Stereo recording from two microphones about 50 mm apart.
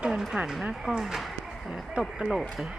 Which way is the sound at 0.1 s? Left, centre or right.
Centre.